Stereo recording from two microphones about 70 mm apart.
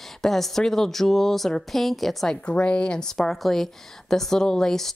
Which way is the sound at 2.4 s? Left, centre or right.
Centre.